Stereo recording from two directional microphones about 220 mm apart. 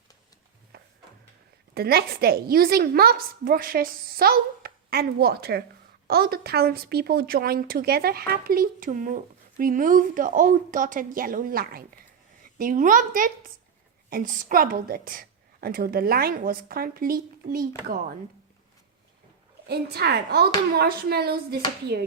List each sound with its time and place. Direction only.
0.7 s drawer open or close: 45° right (ahead or behind)
1.7 s a woman's voice: 45° right (ahead or behind)
19.6 s a woman's voice: 45° right (ahead or behind)